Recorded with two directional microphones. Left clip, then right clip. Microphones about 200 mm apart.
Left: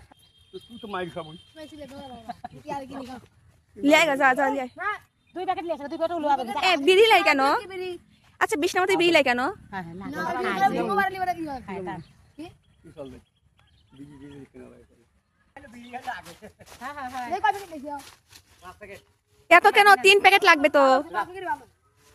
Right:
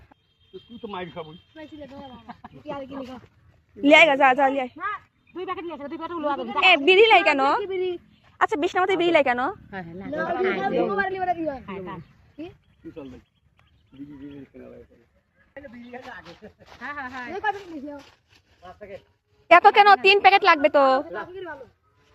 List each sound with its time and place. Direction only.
0.8 s a woman's voice: 20° left (ahead or behind)
3.8 s a woman's voice: 5° left (ahead or behind)
5.3 s a woman's voice: 30° left (ahead or behind)
6.6 s a woman's voice: 5° left (ahead or behind)
7.6 s a woman's voice: 35° left (ahead or behind)
8.4 s a woman's voice: 15° left (ahead or behind); by 11.5 s 35° left (ahead or behind)
11.6 s a woman's voice: 20° left (ahead or behind)
13.9 s a woman's voice: 20° left (ahead or behind)
16.2 s speech: 30° right (ahead or behind)
16.8 s a woman's voice: 5° right (ahead or behind)
19.5 s a woman's voice: 20° left (ahead or behind)